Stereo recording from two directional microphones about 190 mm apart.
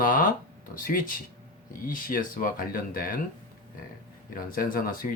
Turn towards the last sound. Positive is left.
turn(degrees=50)  # may be behind; listen again after turning